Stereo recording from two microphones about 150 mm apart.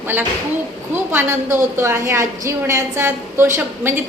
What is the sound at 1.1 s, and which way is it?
A woman's voice, 15° right (ahead or behind).